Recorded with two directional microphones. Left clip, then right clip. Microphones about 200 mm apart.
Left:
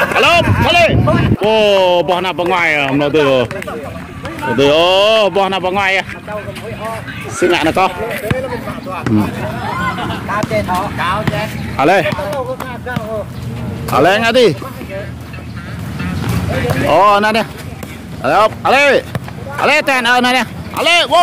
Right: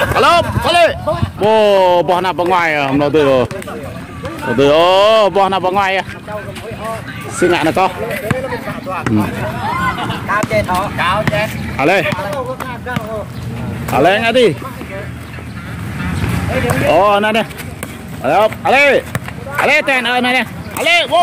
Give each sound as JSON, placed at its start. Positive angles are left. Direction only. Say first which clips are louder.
{"t": 0.0, "sound": "speech", "louder": "even", "side_deg": -10}
{"t": 7.5, "sound": "speech", "louder": "left 2 dB", "side_deg": 0}
{"t": 9.0, "sound": "speech", "louder": "left 1 dB", "side_deg": 15}
{"t": 9.6, "sound": "vehicle", "louder": "right 2 dB", "side_deg": -55}
{"t": 10.7, "sound": "speech", "louder": "right 1 dB", "side_deg": -30}
{"t": 11.7, "sound": "speech", "louder": "left 2 dB", "side_deg": 10}
{"t": 13.9, "sound": "speech", "louder": "left 1 dB", "side_deg": 10}
{"t": 16.9, "sound": "speech", "louder": "left 2 dB", "side_deg": 5}